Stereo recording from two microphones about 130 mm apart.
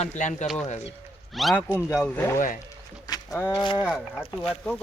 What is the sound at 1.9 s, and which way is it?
Speech, 20° left (ahead or behind).